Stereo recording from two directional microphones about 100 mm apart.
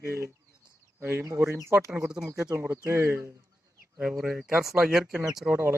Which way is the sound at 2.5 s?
25° right (ahead or behind).